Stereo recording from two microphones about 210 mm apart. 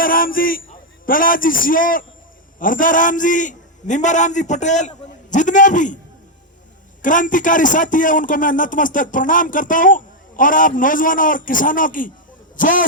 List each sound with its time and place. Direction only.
0.0 s a man's voice: 40° left (ahead or behind)
7.0 s a man's voice: 40° left (ahead or behind)